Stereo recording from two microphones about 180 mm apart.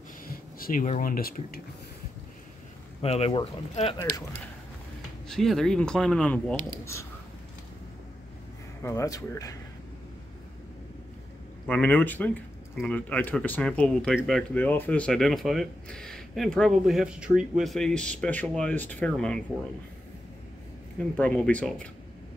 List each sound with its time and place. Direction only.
0.6 s speech: 50° left (ahead or behind)
3.0 s speech: 35° left (ahead or behind)
5.3 s speech: centre (ahead or behind)
6.8 s a man's voice: 15° left (ahead or behind)
8.8 s speech: 20° left (ahead or behind)
11.6 s a man's voice: 10° left (ahead or behind)
21.2 s a man's voice: 5° left (ahead or behind)